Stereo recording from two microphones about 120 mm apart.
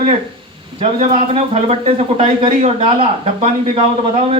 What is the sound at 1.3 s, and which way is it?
Speech, 55° right (ahead or behind).